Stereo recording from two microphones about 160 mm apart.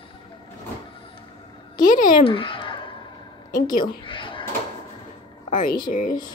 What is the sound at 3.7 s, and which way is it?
Speech, 30° left (ahead or behind).